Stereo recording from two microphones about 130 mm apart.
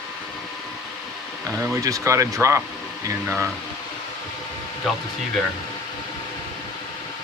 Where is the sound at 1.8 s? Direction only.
25° right (ahead or behind).